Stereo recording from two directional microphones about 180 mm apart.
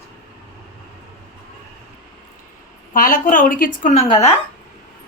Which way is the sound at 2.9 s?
50° left (ahead or behind).